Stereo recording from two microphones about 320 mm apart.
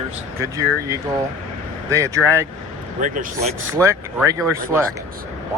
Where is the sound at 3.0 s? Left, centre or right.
Right.